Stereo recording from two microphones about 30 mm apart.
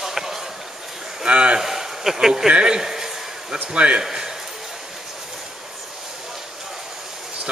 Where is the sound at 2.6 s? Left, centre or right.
Right.